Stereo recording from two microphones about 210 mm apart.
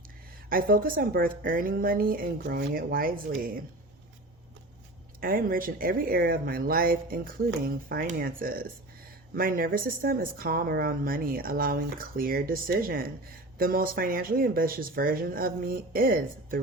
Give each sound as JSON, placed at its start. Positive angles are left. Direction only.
{"t": 0.5, "sound": "a woman's voice", "side_deg": -45}
{"t": 5.2, "sound": "a woman's voice", "side_deg": -45}